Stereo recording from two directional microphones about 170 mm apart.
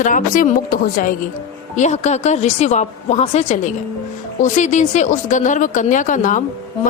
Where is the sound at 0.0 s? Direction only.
50° left (ahead or behind).